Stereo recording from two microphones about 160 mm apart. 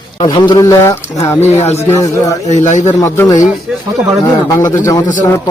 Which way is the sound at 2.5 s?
45° left (ahead or behind).